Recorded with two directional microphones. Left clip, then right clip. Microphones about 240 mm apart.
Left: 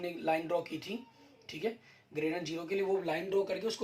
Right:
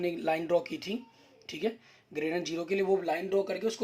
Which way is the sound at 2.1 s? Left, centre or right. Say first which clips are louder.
Right 3 dB; right.